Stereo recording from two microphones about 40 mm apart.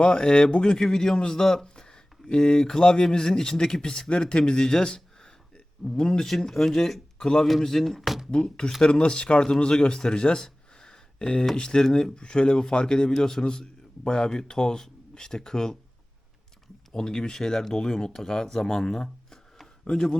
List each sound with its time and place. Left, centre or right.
0.0 s speech: left
6.2 s speech: centre
8.8 s speech: left
16.9 s speech: centre
19.8 s speech: centre